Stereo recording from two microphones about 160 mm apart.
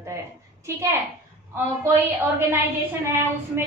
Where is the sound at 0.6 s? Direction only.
15° right (ahead or behind).